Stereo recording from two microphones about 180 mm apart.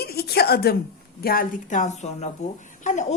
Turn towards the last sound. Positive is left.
turn(degrees=40)  # may be behind; listen again after turning